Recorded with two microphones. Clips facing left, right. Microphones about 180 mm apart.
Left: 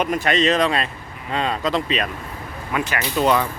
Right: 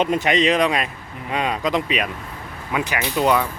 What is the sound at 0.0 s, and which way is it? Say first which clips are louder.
Speech: right 1 dB; 20° right (ahead or behind).